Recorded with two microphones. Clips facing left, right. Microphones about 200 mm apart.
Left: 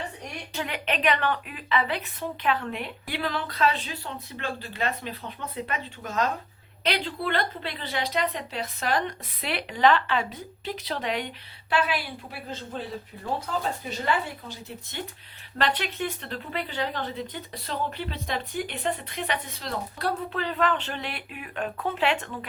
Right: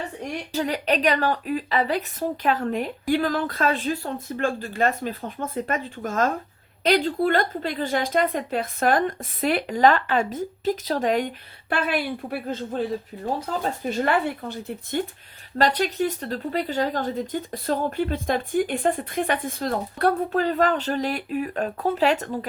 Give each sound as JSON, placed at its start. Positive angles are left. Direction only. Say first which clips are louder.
{"t": 0.5, "sound": "speech", "louder": "right 7 dB", "side_deg": -40}
{"t": 15.5, "sound": "speech", "louder": "right 6 dB", "side_deg": -40}